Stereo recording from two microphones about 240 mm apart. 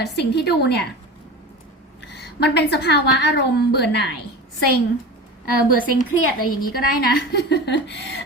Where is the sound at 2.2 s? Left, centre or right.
Left.